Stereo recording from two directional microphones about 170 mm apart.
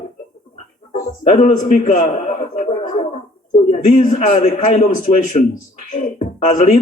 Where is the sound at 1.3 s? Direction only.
40° left (ahead or behind).